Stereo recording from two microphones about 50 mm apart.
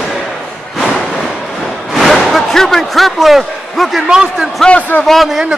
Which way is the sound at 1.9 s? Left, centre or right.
Centre.